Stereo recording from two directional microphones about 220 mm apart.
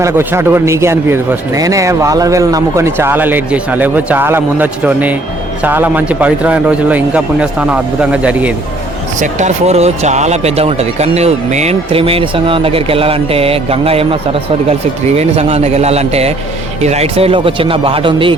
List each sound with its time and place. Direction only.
0.0 s a man's voice: 10° right (ahead or behind)
9.1 s speech: 35° right (ahead or behind)